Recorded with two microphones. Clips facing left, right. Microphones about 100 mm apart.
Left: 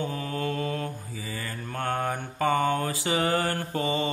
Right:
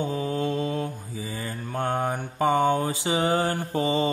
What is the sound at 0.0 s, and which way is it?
Mantra, 20° right (ahead or behind).